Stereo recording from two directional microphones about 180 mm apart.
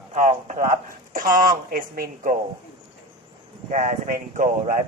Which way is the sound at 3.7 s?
45° right (ahead or behind).